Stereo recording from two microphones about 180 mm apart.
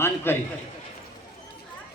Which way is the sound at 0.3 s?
10° left (ahead or behind).